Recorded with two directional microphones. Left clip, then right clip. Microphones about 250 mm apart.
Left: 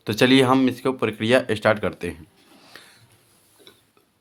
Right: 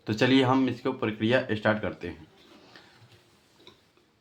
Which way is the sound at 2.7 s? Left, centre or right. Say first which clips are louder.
Left 9 dB; left.